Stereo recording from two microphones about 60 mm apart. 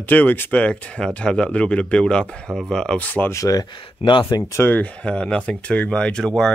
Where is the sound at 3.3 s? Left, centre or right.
Left.